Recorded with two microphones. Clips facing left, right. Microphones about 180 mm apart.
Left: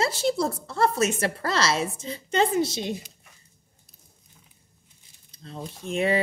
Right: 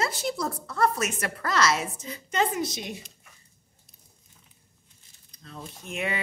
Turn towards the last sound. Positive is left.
turn(degrees=35)  # may be behind; listen again after turning